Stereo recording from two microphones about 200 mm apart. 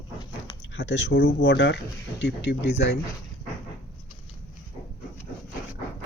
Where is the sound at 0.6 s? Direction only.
65° left (ahead or behind).